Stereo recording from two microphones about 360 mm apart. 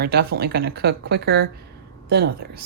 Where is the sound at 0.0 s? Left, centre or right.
Right.